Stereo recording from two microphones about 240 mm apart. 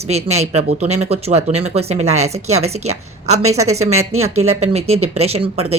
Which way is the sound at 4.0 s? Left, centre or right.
Right.